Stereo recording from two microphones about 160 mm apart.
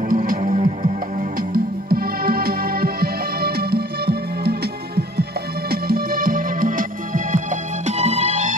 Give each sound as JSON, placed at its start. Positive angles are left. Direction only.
{"t": 0.1, "sound": "music", "side_deg": -60}
{"t": 1.5, "sound": "music", "side_deg": -70}
{"t": 5.7, "sound": "music", "side_deg": -70}